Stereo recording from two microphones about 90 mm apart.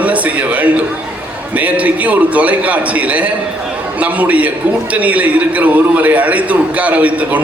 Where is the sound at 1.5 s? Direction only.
15° right (ahead or behind).